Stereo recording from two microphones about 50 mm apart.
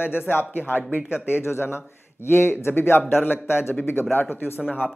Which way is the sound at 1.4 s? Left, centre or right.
Left.